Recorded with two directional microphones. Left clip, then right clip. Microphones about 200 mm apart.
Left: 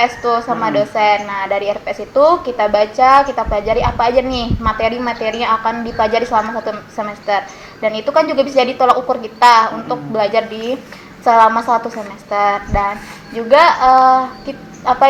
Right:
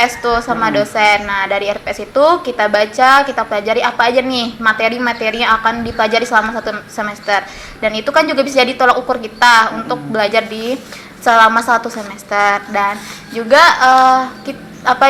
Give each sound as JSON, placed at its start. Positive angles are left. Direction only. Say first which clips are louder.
{"t": 0.0, "sound": "a woman's voice", "louder": "right 1 dB", "side_deg": -5}
{"t": 9.6, "sound": "a woman's voice", "louder": "right 1 dB", "side_deg": -20}
{"t": 10.2, "sound": "a woman's voice", "louder": "right 1 dB", "side_deg": -5}